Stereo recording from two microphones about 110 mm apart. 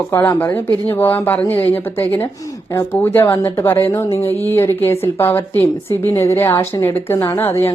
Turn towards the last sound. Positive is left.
turn(degrees=25)  # may be behind; listen again after turning